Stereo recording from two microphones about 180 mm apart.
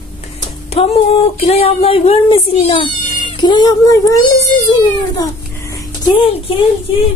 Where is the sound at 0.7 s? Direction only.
35° left (ahead or behind); by 6.1 s 15° left (ahead or behind).